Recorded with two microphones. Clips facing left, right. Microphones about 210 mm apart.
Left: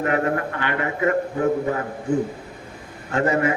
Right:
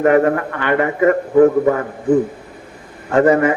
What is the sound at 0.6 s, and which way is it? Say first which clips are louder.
Speech: right 11 dB; 50° right (ahead or behind).